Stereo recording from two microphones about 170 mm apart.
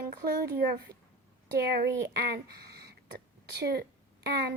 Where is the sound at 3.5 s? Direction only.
70° right (ahead or behind).